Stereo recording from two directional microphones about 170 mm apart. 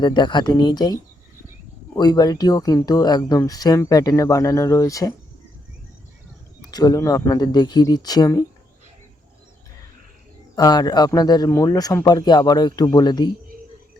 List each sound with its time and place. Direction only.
0.0 s speech: 25° left (ahead or behind)
2.0 s speech: 25° left (ahead or behind)
6.7 s speech: 20° left (ahead or behind)
10.5 s speech: 20° left (ahead or behind)